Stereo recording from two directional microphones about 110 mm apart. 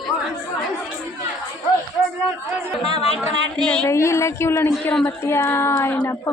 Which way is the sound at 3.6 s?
10° left (ahead or behind).